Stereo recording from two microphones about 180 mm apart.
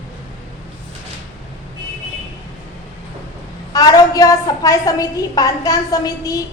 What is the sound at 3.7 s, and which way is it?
A woman's voice, 20° left (ahead or behind).